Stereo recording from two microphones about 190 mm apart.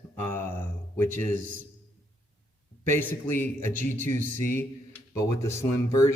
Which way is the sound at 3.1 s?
10° left (ahead or behind).